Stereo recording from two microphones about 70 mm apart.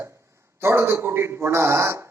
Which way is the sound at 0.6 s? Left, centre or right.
Right.